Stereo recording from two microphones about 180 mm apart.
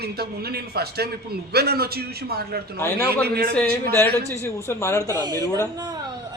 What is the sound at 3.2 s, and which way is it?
Speech, 60° right (ahead or behind).